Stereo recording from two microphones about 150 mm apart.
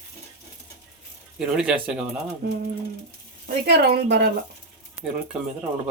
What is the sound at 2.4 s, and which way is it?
Speech, 90° right.